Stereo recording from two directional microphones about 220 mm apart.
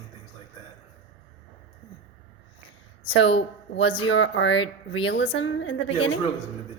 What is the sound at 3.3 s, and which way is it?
Speech, 25° left (ahead or behind).